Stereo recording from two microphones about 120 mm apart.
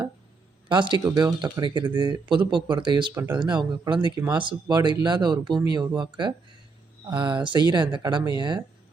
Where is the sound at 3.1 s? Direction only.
15° right (ahead or behind).